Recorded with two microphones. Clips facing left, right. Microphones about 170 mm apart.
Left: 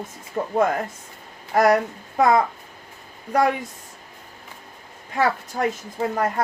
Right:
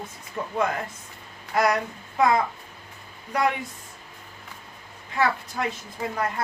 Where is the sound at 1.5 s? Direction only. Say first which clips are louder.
Left 6 dB; 45° left (ahead or behind).